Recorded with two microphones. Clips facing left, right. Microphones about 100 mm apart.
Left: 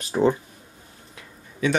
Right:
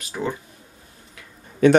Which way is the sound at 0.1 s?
30° left (ahead or behind).